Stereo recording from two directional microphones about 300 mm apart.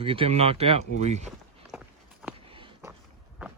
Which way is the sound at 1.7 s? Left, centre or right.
Centre.